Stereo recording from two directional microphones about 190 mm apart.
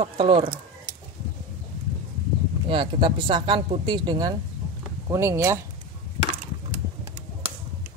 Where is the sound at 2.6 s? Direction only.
25° right (ahead or behind).